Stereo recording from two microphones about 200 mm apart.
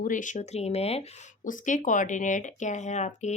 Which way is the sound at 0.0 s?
40° left (ahead or behind).